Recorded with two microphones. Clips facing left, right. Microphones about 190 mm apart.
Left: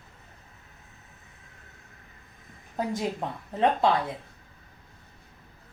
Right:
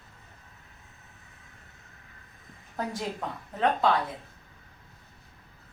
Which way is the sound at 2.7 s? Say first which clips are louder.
Left 4 dB; 25° left (ahead or behind).